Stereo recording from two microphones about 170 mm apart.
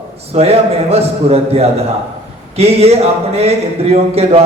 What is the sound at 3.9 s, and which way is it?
Speech, 35° right (ahead or behind).